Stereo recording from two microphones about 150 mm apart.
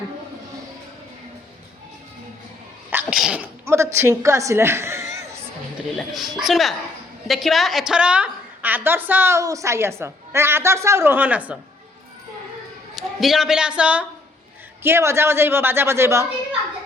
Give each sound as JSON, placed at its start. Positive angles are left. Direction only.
{"t": 2.9, "sound": "sneeze", "side_deg": -5}
{"t": 3.9, "sound": "a woman's voice", "side_deg": -20}
{"t": 6.0, "sound": "a woman's voice", "side_deg": 0}
{"t": 13.0, "sound": "a woman's voice", "side_deg": 0}